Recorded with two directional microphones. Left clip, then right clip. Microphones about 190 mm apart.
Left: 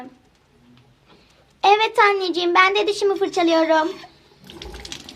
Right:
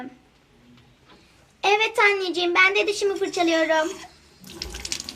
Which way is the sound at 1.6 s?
30° left (ahead or behind).